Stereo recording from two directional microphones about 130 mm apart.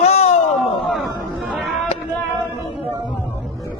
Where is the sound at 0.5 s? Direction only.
Centre (ahead or behind).